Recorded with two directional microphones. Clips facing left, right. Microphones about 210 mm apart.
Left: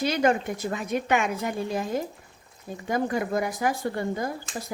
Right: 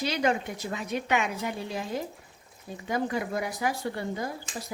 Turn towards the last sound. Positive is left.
turn(degrees=50)  # may be behind; listen again after turning